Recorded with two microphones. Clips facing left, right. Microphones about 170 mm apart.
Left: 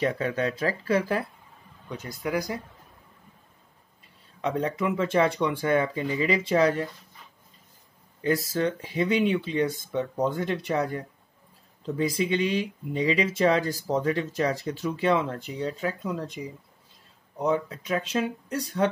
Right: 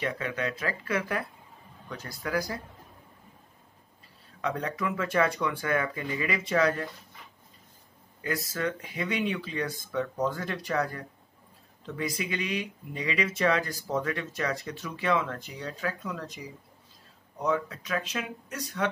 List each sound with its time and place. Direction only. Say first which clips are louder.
0.0 s speech: left 5 dB; 35° left (ahead or behind)
1.9 s speech: left 3 dB; 15° left (ahead or behind)
4.4 s speech: left 4 dB; 25° left (ahead or behind)
8.2 s speech: left 6 dB; 30° left (ahead or behind)